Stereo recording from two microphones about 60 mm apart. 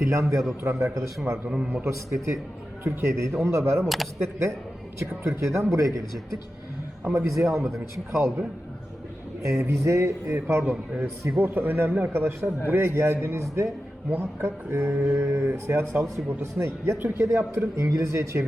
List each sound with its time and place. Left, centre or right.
0.0 s speech: right
0.6 s speech: right
0.9 s speech: right
1.5 s a man's voice: centre
2.0 s speech: right
3.8 s speech: centre
4.9 s speech: right
7.0 s speech: right
7.5 s speech: centre
8.1 s speech: right
9.4 s speech: right
10.6 s a man's voice: right
11.3 s speech: right
12.1 s speech: right